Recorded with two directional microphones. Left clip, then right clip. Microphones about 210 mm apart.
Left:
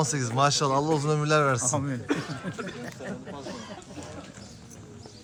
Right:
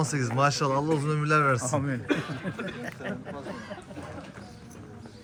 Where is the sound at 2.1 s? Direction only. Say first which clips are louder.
Right 1 dB; 35° left (ahead or behind).